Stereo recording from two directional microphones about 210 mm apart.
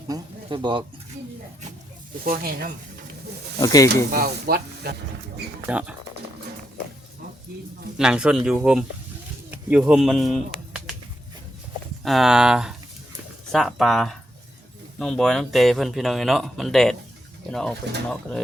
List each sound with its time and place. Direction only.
0.1 s a sound: 20° right (ahead or behind)
2.2 s speech: 45° right (ahead or behind)
3.6 s speech: 20° left (ahead or behind)
4.1 s speech: 45° right (ahead or behind)
5.6 s speech: 5° right (ahead or behind)
7.9 s speech: 5° right (ahead or behind)
12.0 s speech: centre (ahead or behind)